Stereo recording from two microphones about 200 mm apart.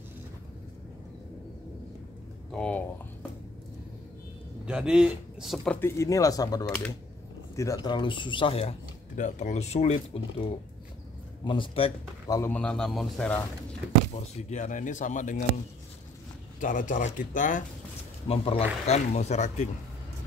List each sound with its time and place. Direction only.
2.5 s speech: 5° left (ahead or behind)
4.6 s speech: 5° right (ahead or behind); by 10.2 s 35° left (ahead or behind)
11.4 s speech: 25° left (ahead or behind)
12.4 s speech: 10° left (ahead or behind)
14.1 s speech: 35° left (ahead or behind)
16.5 s speech: 40° left (ahead or behind)
18.3 s speech: 30° left (ahead or behind)